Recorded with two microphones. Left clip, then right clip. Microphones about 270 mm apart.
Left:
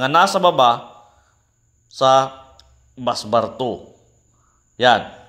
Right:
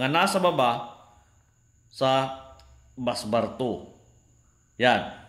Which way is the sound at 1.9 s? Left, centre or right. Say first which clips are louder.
Left 9 dB; centre.